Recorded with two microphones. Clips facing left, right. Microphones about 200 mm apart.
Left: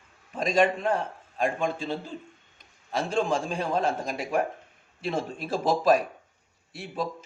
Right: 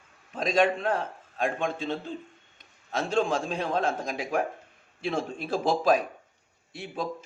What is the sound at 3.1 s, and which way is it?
A man's voice, 5° left (ahead or behind).